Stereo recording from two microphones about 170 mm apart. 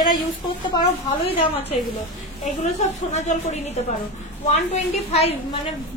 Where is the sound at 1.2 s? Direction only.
35° left (ahead or behind).